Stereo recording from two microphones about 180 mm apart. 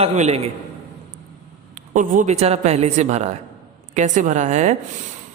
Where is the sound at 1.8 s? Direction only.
45° right (ahead or behind).